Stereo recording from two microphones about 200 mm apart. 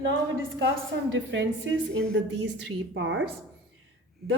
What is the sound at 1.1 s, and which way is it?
A woman's voice, 70° right (ahead or behind).